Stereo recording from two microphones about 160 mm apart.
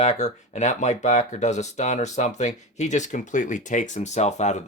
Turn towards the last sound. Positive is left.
turn(degrees=45)  # may be behind; listen again after turning